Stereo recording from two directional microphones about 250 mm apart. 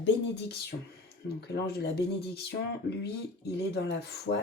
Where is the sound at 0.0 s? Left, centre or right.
Left.